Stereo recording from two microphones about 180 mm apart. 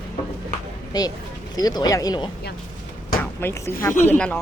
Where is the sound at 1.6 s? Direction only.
20° left (ahead or behind).